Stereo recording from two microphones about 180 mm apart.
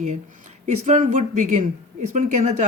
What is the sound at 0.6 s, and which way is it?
A woman's voice, 45° right (ahead or behind).